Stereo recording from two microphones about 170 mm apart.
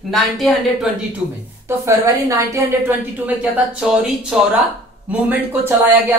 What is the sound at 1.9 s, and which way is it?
Speech, 20° right (ahead or behind).